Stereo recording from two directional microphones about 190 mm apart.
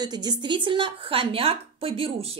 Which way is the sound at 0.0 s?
20° right (ahead or behind).